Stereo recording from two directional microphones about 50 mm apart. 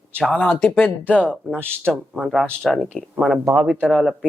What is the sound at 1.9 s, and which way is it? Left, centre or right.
Speech, centre.